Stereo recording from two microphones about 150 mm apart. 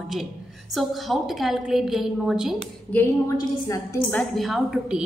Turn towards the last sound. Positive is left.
turn(degrees=-5)  # may be behind; listen again after turning